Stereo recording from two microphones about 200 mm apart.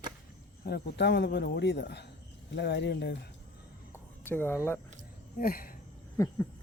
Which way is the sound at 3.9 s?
10° left (ahead or behind).